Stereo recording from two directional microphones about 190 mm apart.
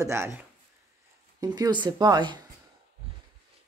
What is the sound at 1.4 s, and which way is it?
Speech, 20° right (ahead or behind).